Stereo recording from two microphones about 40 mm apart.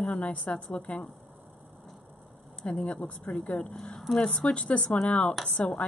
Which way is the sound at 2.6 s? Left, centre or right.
Left.